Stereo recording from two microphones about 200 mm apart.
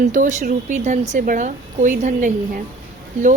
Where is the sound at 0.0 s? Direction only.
40° right (ahead or behind).